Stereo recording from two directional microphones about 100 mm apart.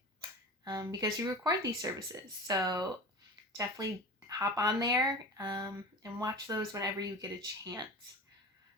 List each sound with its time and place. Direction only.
0.2 s speech: 40° right (ahead or behind)
4.4 s speech: 40° right (ahead or behind)